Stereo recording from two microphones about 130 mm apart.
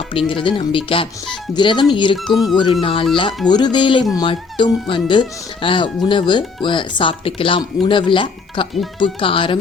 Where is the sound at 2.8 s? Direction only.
40° left (ahead or behind).